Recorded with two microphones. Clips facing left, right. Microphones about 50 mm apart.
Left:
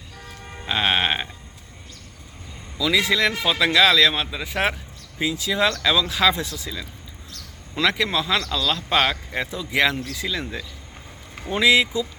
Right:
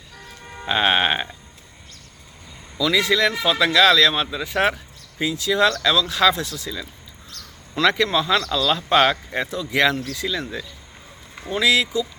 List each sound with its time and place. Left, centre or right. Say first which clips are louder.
0.6 s speech: right 3 dB; centre
2.7 s speech: right 1 dB; centre
11.5 s speech: left 1 dB; centre